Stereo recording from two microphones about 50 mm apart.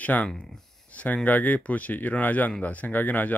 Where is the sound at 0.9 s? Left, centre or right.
Left.